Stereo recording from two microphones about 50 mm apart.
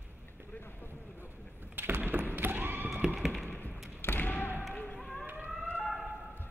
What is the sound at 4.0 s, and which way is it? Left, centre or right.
Basketball bounce, left.